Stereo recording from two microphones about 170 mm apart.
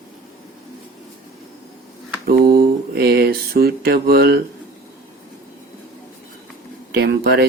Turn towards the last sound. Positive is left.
turn(degrees=-65)  # may be behind; listen again after turning